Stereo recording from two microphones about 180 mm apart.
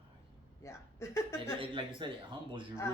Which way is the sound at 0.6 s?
15° left (ahead or behind).